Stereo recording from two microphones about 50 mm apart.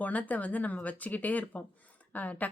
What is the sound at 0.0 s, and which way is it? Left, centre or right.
Speech, left.